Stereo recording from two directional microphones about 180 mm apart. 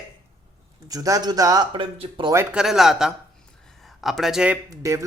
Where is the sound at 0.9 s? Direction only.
20° right (ahead or behind).